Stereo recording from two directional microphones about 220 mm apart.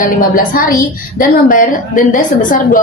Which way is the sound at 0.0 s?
40° left (ahead or behind).